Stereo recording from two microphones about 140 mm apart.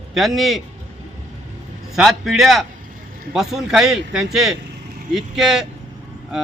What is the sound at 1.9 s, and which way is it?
A man's voice, centre (ahead or behind).